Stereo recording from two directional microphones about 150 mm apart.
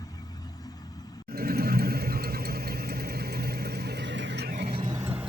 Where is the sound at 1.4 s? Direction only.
90° right.